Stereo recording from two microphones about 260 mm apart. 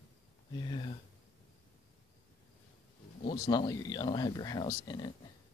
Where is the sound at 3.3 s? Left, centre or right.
Centre.